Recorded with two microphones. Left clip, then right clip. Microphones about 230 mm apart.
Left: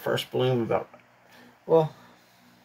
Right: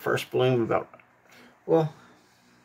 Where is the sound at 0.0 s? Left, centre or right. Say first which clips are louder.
Right 1 dB; right.